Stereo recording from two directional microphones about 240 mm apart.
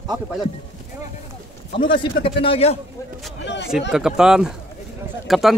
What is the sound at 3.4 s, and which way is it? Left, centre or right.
Speech, left.